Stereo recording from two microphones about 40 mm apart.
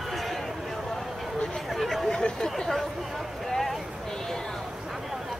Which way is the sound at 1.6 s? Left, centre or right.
Centre.